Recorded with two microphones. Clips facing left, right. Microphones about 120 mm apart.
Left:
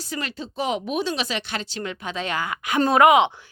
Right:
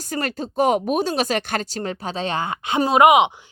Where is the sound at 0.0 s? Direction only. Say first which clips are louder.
Right 5 dB; 50° right (ahead or behind).